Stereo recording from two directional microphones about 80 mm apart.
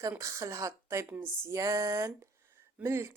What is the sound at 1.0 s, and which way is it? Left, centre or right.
Speech, right.